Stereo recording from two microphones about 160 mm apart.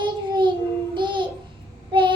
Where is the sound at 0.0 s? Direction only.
30° right (ahead or behind).